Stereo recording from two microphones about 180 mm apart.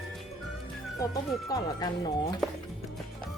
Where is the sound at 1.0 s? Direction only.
20° left (ahead or behind).